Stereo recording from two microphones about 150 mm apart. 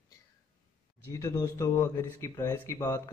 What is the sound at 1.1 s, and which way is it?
Speech, 20° left (ahead or behind).